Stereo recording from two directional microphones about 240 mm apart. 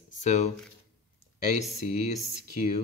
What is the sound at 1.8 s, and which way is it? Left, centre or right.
Speech, left.